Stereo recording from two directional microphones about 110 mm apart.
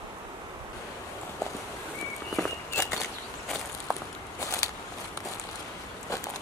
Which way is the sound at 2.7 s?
25° left (ahead or behind).